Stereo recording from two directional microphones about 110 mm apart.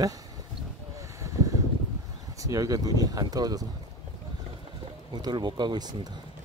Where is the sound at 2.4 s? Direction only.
30° right (ahead or behind).